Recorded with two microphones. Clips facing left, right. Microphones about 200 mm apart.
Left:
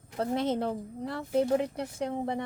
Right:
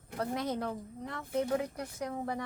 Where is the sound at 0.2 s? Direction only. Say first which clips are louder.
Left 5 dB; 25° left (ahead or behind).